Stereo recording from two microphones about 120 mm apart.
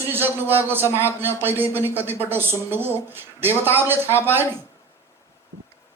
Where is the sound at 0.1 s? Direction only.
15° right (ahead or behind).